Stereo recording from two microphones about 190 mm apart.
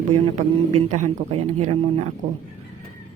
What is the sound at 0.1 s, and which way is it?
Speech, 40° right (ahead or behind).